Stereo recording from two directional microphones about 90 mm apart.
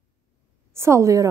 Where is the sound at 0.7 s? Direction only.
30° right (ahead or behind).